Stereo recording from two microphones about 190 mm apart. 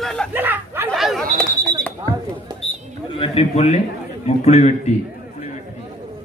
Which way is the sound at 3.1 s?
35° left (ahead or behind).